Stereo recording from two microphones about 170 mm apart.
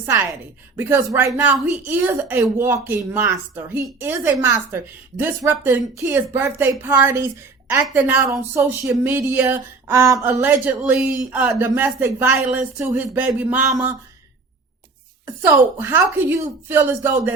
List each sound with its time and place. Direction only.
0.0 s speech: 15° right (ahead or behind)
13.7 s a sound: 20° right (ahead or behind)
15.8 s speech: 10° right (ahead or behind)